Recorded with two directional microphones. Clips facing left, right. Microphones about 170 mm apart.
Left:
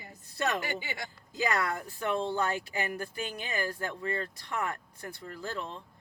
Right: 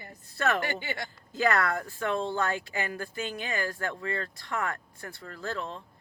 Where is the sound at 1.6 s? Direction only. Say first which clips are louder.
Right 3 dB; 15° left (ahead or behind).